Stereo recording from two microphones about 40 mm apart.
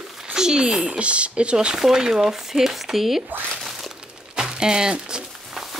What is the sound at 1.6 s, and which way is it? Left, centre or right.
Speech, centre.